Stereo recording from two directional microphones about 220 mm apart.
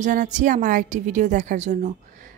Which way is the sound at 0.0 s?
35° right (ahead or behind).